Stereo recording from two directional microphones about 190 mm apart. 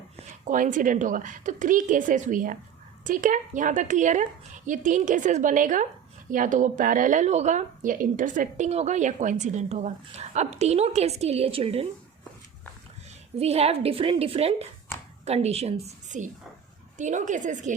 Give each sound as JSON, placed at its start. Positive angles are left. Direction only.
{"t": 0.4, "sound": "a woman's voice", "side_deg": -45}
{"t": 13.4, "sound": "speech", "side_deg": -35}